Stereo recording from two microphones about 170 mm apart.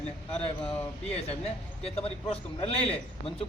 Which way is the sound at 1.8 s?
35° left (ahead or behind).